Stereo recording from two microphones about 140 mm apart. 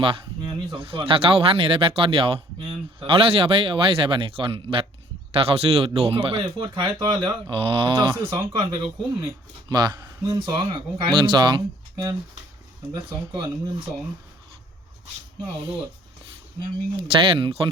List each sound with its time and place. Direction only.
0.0 s speech: 40° right (ahead or behind)
8.1 s speech: 20° right (ahead or behind)
8.8 s speech: 30° right (ahead or behind)
12.9 s speech: 35° right (ahead or behind)
17.0 s speech: 40° right (ahead or behind)